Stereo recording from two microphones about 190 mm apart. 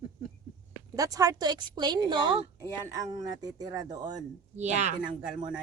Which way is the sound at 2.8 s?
15° right (ahead or behind).